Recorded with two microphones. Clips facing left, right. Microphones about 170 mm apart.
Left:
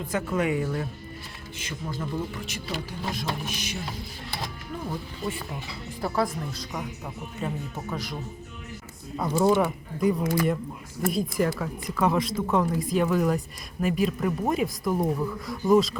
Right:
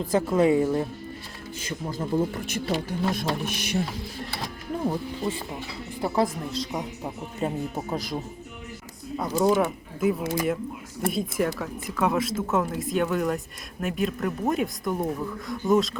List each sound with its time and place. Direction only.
0.0 s speech: 35° right (ahead or behind)
2.5 s speech: 50° right (ahead or behind)
4.9 s speech: 25° right (ahead or behind)
9.1 s speech: centre (ahead or behind)